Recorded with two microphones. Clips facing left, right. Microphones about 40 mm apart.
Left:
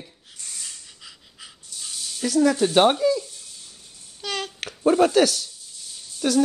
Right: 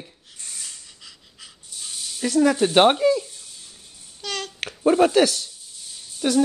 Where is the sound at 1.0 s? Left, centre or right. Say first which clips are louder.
Left 1 dB; centre.